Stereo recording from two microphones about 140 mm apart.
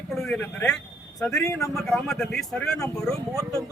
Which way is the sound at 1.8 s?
5° left (ahead or behind).